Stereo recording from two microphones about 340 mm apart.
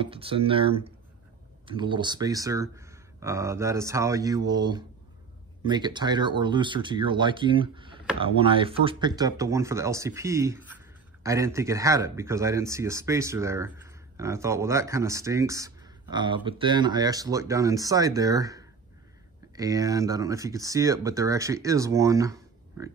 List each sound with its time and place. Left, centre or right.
0.0 s speech: centre